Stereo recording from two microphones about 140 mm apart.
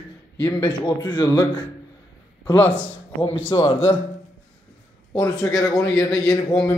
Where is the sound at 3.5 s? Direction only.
35° left (ahead or behind).